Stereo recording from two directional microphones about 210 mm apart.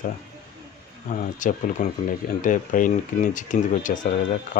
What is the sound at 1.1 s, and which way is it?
Speech, 40° left (ahead or behind).